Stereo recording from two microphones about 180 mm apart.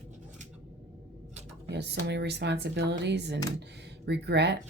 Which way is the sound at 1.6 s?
70° right (ahead or behind).